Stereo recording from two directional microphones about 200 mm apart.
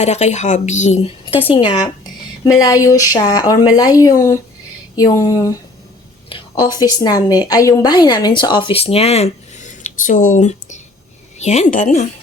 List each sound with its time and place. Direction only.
0.0 s a woman's voice: 35° left (ahead or behind); by 5.5 s 15° left (ahead or behind)
6.2 s a sound: 25° left (ahead or behind)
6.7 s a woman's voice: 20° left (ahead or behind); by 12.0 s 40° left (ahead or behind)